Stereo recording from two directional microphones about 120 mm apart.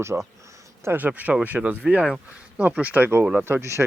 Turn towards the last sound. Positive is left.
turn(degrees=-25)  # may be behind; listen again after turning